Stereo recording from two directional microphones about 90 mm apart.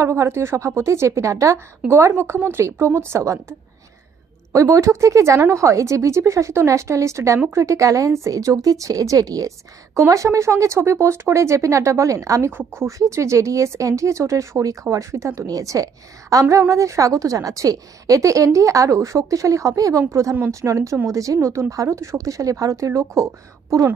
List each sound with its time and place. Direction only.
0.0 s a woman's voice: 30° right (ahead or behind)